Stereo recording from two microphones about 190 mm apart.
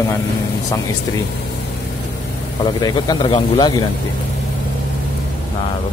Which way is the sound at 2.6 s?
20° left (ahead or behind).